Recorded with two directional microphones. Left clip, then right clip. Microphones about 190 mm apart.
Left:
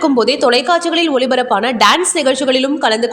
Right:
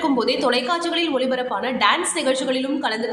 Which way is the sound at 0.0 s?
35° left (ahead or behind).